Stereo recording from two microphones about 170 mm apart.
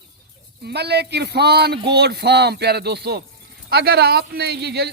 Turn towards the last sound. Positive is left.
turn(degrees=-75)  # may be behind; listen again after turning